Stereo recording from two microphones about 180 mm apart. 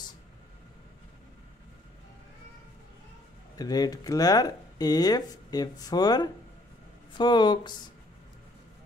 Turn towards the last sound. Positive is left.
turn(degrees=25)  # may be behind; listen again after turning